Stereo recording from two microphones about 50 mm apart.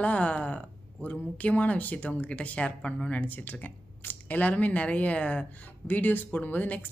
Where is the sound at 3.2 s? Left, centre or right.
Left.